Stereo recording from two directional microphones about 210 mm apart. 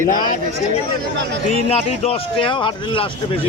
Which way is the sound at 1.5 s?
30° left (ahead or behind).